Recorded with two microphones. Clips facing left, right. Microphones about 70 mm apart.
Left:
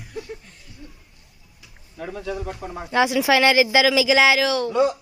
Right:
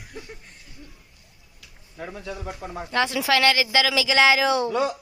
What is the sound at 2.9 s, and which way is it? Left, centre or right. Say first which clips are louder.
Speech: left 4 dB; centre.